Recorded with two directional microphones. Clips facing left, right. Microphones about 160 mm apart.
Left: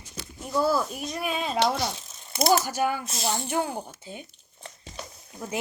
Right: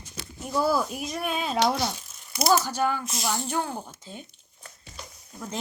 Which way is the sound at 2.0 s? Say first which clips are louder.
Left 3 dB; 25° left (ahead or behind).